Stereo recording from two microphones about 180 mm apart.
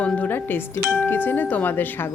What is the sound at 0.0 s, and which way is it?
Speech, 10° left (ahead or behind).